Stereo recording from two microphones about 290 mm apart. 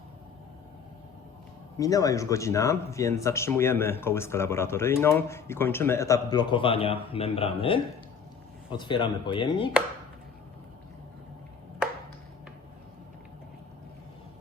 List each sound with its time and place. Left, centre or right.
1.8 s speech: centre